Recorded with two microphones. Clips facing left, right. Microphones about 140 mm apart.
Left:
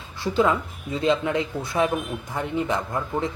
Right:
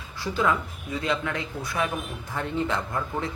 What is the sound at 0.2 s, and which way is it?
Speech, 25° left (ahead or behind).